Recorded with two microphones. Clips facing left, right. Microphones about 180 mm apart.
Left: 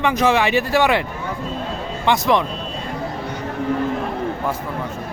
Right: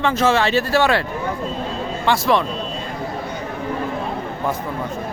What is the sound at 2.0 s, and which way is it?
Speech, 20° left (ahead or behind).